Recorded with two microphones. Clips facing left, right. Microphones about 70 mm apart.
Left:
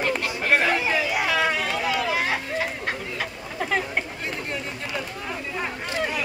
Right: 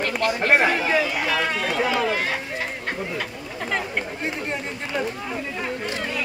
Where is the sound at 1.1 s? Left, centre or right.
Centre.